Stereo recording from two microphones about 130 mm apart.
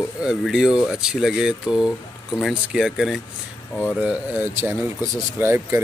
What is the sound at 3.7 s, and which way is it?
Speech, 10° left (ahead or behind).